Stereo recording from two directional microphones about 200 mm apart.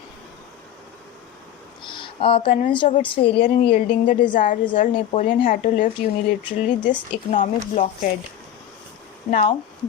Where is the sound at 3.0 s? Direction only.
25° left (ahead or behind).